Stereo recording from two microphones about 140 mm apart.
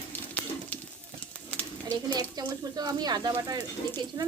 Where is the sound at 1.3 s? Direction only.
10° left (ahead or behind).